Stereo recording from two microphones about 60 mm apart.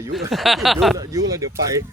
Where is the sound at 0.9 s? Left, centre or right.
Right.